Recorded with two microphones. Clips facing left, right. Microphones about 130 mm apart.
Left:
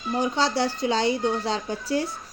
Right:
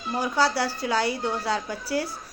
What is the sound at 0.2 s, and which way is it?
A woman's voice, 20° left (ahead or behind).